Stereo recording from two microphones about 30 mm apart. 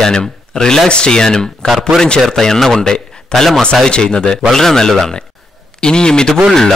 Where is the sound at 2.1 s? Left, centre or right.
Centre.